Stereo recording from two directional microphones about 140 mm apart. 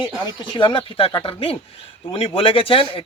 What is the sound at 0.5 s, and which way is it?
A man's voice, 35° left (ahead or behind).